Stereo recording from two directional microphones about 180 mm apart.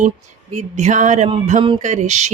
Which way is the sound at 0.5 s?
40° right (ahead or behind).